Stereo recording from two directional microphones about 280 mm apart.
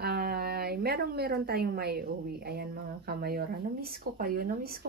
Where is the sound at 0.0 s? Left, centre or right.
Right.